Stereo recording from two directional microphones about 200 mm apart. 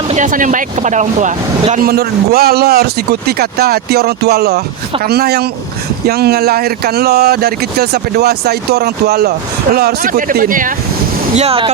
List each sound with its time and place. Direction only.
0.1 s speech: 40° right (ahead or behind)
11.3 s speech: 30° right (ahead or behind)